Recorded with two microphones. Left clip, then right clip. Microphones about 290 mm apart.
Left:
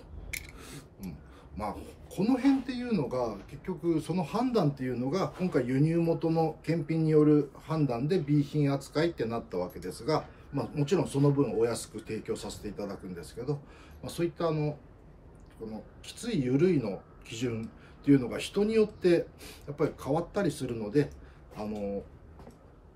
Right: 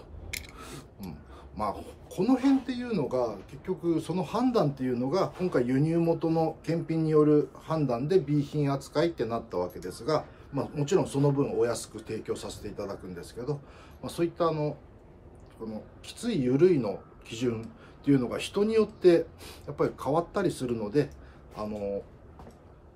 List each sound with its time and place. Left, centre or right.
0.6 s a sound: centre
1.6 s speech: centre
16.1 s speech: centre